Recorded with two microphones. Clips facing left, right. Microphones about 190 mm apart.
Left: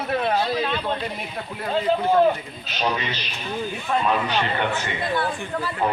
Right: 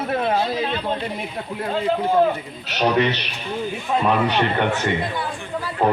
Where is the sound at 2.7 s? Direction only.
70° right (ahead or behind).